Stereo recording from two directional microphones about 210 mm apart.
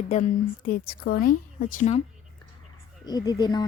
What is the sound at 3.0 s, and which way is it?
Speech, 20° left (ahead or behind).